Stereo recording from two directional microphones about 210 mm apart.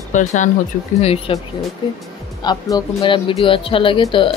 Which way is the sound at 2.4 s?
20° left (ahead or behind).